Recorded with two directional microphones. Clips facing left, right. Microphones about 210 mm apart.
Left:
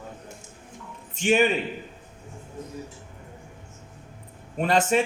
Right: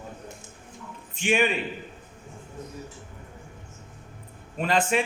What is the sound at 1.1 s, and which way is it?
Speech, 40° left (ahead or behind).